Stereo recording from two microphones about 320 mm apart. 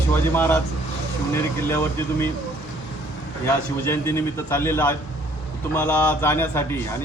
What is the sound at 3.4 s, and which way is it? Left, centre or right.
A man's voice, centre.